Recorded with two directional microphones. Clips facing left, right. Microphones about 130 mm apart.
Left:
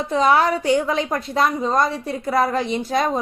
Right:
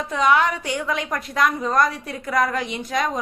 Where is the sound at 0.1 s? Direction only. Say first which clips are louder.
Left 2 dB; 35° left (ahead or behind).